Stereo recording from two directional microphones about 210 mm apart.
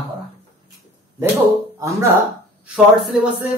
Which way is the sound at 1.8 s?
15° right (ahead or behind).